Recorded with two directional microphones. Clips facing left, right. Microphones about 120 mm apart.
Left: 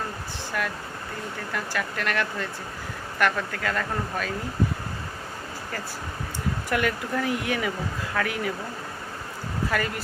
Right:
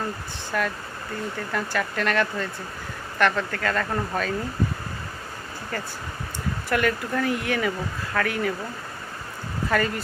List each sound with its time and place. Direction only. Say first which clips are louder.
0.5 s speech: right 4 dB; 5° left (ahead or behind)
6.7 s speech: right 3 dB; 15° left (ahead or behind)